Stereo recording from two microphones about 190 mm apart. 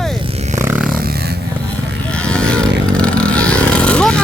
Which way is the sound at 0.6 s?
10° right (ahead or behind).